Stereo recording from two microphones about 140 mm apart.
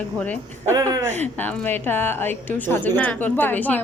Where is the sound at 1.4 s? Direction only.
15° left (ahead or behind).